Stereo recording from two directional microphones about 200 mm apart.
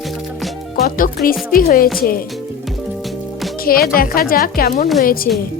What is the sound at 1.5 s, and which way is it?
Speech, 45° left (ahead or behind).